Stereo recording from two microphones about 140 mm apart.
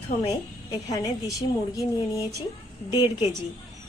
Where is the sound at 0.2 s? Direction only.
25° left (ahead or behind).